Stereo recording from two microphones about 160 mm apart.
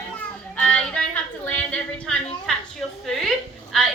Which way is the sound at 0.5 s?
5° left (ahead or behind).